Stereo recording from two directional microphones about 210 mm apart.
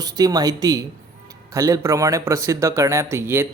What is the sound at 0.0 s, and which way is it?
Speech, 20° right (ahead or behind).